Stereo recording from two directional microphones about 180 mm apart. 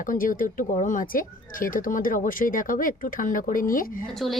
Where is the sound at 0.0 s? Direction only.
50° left (ahead or behind).